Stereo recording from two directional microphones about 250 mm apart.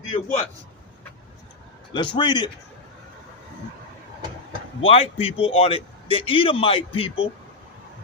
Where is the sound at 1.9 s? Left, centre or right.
Centre.